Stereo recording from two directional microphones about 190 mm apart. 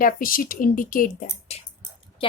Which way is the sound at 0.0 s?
50° left (ahead or behind).